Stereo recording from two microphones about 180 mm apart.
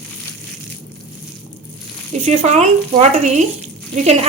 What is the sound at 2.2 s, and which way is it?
A woman's voice, 40° right (ahead or behind).